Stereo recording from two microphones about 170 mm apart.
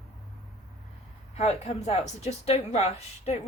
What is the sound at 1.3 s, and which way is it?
A woman's voice, 40° left (ahead or behind).